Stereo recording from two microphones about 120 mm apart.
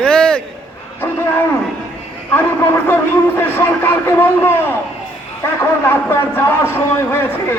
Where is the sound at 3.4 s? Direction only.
20° left (ahead or behind).